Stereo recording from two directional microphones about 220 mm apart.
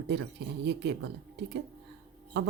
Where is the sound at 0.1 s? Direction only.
50° right (ahead or behind).